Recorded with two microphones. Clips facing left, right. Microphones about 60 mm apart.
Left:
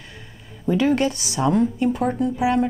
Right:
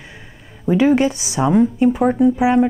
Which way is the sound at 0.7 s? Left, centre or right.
Right.